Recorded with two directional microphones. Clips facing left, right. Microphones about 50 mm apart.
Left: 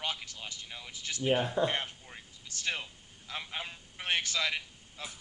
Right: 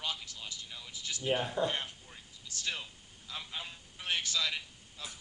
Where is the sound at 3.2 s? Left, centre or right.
Left.